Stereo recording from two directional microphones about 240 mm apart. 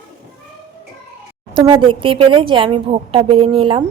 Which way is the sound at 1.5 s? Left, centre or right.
Centre.